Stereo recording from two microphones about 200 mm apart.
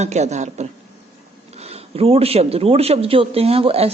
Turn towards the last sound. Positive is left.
turn(degrees=-30)  # may be behind; listen again after turning